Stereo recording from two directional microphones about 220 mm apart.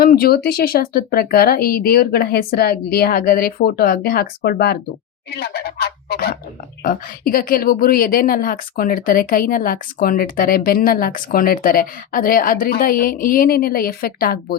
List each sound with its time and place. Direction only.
0.0 s speech: 40° left (ahead or behind)
5.3 s a sound: 45° left (ahead or behind)
6.8 s speech: 40° left (ahead or behind)